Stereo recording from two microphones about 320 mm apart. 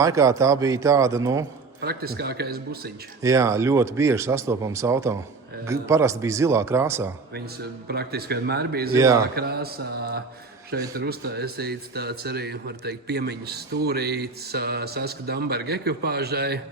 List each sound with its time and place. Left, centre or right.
0.0 s speech: centre
1.8 s speech: right
3.2 s speech: centre
7.9 s speech: right
9.0 s speech: centre
9.3 s speech: right